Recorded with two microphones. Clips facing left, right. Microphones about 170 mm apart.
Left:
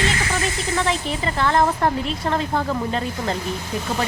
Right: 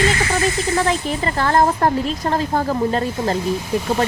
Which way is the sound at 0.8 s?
45° right (ahead or behind).